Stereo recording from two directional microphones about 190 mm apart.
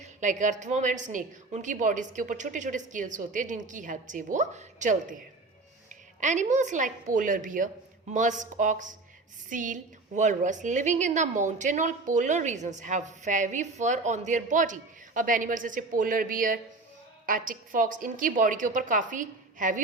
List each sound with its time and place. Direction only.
0.0 s a woman's voice: 40° right (ahead or behind)
6.1 s a woman's voice: 40° right (ahead or behind)